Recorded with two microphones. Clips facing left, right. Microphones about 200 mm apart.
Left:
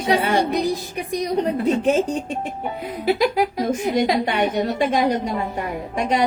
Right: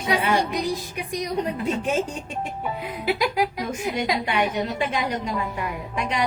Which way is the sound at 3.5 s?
40° left (ahead or behind).